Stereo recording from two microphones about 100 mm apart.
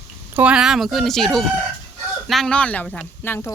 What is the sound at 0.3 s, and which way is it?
Speech, 10° right (ahead or behind).